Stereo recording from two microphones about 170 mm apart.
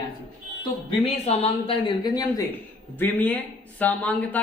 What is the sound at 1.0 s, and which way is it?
Speech, 35° left (ahead or behind).